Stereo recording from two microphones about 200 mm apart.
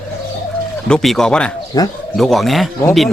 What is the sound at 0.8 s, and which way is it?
Speech, centre (ahead or behind).